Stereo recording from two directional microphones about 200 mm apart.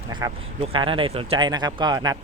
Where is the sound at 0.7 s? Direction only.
25° right (ahead or behind).